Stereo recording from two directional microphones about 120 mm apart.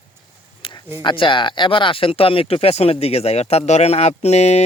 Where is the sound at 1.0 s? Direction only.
45° left (ahead or behind).